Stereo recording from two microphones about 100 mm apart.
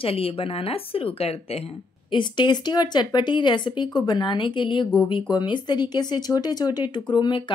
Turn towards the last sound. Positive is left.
turn(degrees=55)  # may be behind; listen again after turning